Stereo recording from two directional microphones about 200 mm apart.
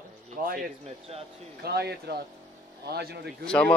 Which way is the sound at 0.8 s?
30° right (ahead or behind).